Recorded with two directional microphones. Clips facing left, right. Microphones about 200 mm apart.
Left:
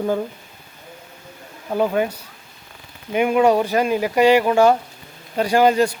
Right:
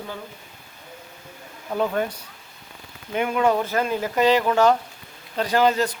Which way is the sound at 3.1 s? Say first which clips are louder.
Left 5 dB; 15° left (ahead or behind).